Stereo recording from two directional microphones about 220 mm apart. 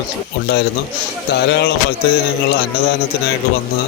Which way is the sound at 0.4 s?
50° left (ahead or behind).